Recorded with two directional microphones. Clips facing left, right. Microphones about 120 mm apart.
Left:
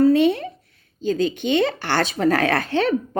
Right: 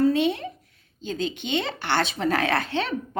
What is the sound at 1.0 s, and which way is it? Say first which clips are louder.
Speech: left 8 dB; 40° left (ahead or behind).